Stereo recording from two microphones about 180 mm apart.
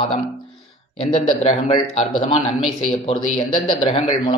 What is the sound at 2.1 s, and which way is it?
A man's voice, 30° left (ahead or behind).